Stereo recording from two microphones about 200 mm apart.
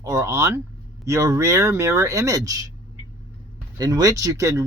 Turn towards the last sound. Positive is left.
turn(degrees=-15)  # may be behind; listen again after turning